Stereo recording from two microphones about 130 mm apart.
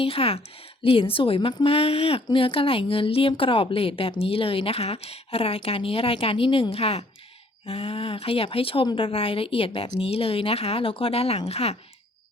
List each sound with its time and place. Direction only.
0.0 s speech: 45° left (ahead or behind)